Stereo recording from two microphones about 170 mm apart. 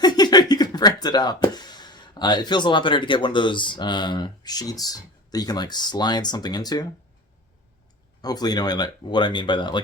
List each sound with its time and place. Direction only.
0.0 s speech: 25° left (ahead or behind)
8.2 s speech: 25° left (ahead or behind)